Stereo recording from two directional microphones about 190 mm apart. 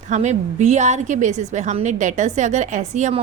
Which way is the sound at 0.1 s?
35° right (ahead or behind).